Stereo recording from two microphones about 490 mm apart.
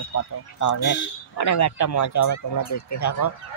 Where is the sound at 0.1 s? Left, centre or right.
Left.